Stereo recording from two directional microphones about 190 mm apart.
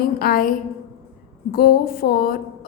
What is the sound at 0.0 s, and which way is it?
Speech, 50° left (ahead or behind).